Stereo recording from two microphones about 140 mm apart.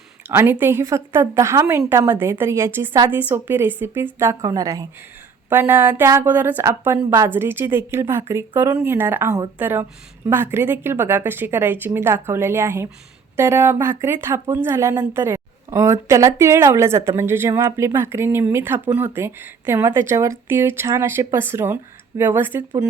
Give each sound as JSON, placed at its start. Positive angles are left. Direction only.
{"t": 0.3, "sound": "a woman's voice", "side_deg": -15}